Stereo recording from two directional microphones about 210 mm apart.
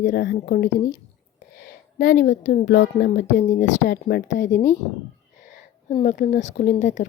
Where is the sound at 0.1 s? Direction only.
50° left (ahead or behind).